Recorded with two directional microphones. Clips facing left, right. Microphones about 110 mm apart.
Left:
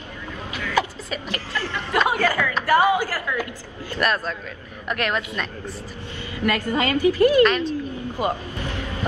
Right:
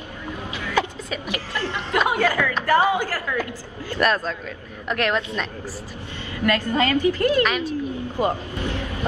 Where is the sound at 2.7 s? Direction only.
15° left (ahead or behind).